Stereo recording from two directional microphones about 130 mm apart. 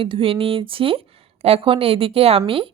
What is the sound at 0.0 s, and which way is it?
A woman's voice, 45° right (ahead or behind).